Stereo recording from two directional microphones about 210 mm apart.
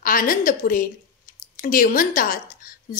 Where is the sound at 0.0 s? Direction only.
40° left (ahead or behind).